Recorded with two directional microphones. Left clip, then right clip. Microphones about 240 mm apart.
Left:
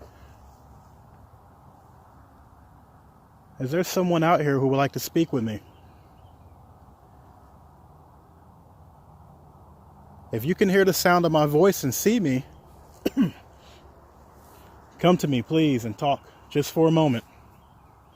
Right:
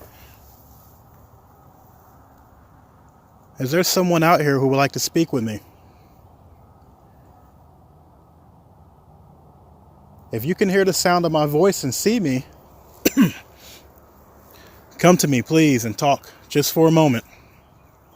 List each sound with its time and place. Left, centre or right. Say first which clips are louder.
3.6 s speech: right 6 dB; centre
10.2 s speech: right 2 dB; centre
13.0 s a sound: right 7 dB; right
14.9 s speech: right 6 dB; centre